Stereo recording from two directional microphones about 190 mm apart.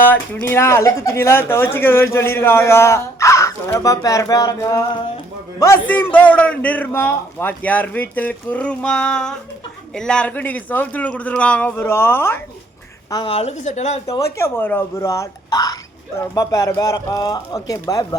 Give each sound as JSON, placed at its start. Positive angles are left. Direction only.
{"t": 0.0, "sound": "speech", "side_deg": 10}
{"t": 13.1, "sound": "a woman's voice", "side_deg": 25}
{"t": 14.3, "sound": "speech", "side_deg": 15}